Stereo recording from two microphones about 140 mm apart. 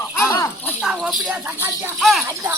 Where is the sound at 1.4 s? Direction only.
20° right (ahead or behind).